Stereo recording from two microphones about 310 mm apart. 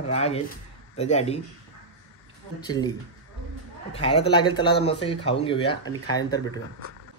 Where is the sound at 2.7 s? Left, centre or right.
Centre.